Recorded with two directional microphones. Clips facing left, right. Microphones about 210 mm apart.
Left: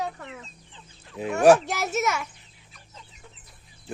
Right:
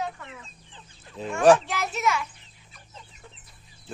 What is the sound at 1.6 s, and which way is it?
Speech, 45° left (ahead or behind).